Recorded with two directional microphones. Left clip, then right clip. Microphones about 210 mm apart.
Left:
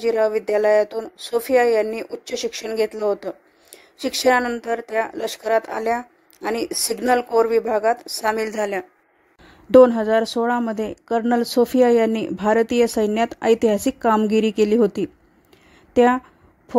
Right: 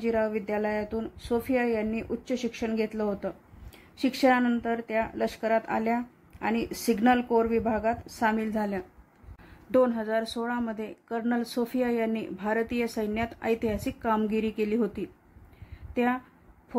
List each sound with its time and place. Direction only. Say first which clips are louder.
0.0 s a woman's voice: left 9 dB; 45° left (ahead or behind)